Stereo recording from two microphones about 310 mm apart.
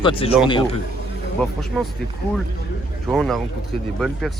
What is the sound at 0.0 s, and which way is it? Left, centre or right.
Speech, centre.